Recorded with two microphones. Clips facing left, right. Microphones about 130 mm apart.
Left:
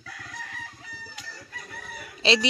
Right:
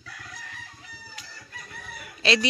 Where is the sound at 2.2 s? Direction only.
25° left (ahead or behind).